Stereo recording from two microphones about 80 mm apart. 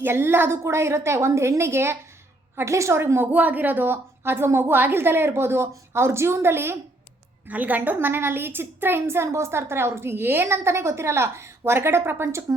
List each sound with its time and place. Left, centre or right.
0.0 s a woman's voice: right
7.4 s a woman's voice: centre; by 12.5 s right